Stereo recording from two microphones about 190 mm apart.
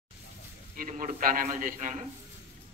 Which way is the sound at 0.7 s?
45° right (ahead or behind).